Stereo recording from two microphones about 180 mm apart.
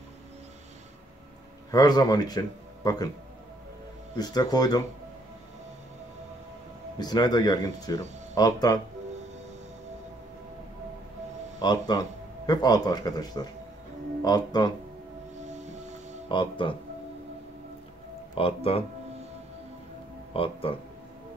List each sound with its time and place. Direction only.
1.7 s speech: 20° left (ahead or behind)
4.2 s speech: 20° left (ahead or behind)
7.0 s speech: 20° left (ahead or behind)
11.6 s speech: 25° left (ahead or behind)
15.4 s music: 40° right (ahead or behind)
16.3 s speech: 25° left (ahead or behind)
18.3 s speech: 30° left (ahead or behind)
20.3 s speech: 30° left (ahead or behind)